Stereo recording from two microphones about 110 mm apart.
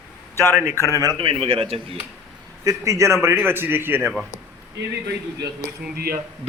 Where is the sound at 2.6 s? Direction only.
30° right (ahead or behind).